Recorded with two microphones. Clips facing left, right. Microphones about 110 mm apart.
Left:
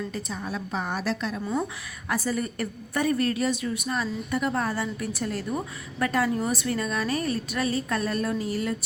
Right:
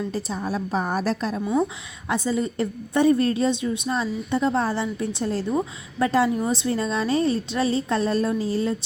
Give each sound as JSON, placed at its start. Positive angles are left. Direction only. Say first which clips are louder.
{"t": 0.1, "sound": "a woman's voice", "louder": "right 5 dB", "side_deg": -35}
{"t": 2.0, "sound": "a woman's voice", "louder": "right 4 dB", "side_deg": -20}